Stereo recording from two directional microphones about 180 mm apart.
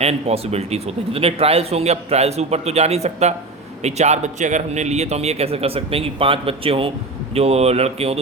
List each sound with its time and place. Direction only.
0.0 s a man's voice: 35° right (ahead or behind)